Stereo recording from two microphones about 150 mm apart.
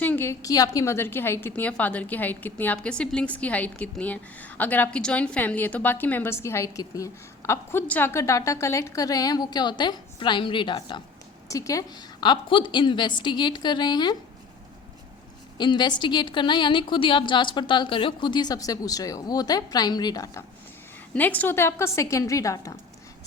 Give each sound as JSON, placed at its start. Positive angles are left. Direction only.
{"t": 0.0, "sound": "a woman's voice", "side_deg": 15}
{"t": 15.5, "sound": "a woman's voice", "side_deg": 30}
{"t": 21.1, "sound": "a woman's voice", "side_deg": 10}